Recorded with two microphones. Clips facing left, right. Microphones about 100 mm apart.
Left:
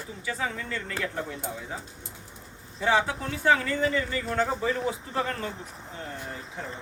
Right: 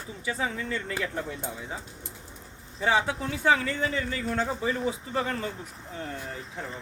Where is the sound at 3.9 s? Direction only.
15° right (ahead or behind).